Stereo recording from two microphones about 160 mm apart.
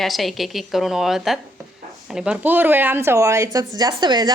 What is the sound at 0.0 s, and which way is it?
A woman's voice, centre (ahead or behind).